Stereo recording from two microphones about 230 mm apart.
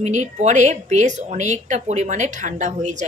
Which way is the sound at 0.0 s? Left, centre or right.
Right.